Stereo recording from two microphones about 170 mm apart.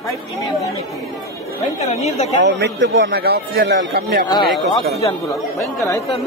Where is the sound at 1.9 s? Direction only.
40° left (ahead or behind).